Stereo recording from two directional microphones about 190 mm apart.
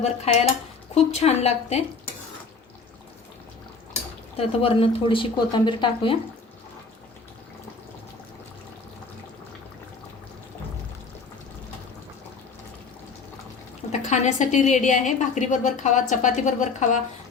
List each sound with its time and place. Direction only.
0.0 s a woman's voice: 35° left (ahead or behind)
4.4 s speech: 30° left (ahead or behind)
13.9 s a woman's voice: 40° left (ahead or behind)